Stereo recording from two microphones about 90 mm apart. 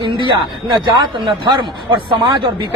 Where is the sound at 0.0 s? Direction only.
60° right (ahead or behind).